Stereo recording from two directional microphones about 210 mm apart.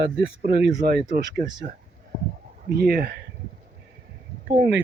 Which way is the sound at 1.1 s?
40° right (ahead or behind).